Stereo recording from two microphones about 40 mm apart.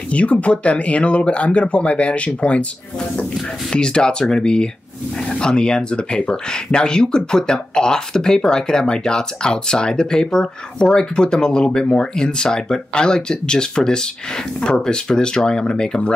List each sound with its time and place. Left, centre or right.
0.1 s speech: left
3.7 s speech: left